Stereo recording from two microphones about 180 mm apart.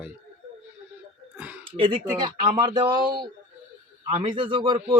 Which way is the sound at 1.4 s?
10° right (ahead or behind).